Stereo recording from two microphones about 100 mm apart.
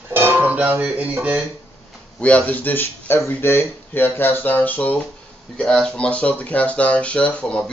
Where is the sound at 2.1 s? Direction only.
15° left (ahead or behind).